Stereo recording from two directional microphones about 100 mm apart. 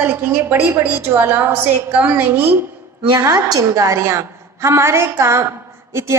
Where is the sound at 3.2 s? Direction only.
35° right (ahead or behind).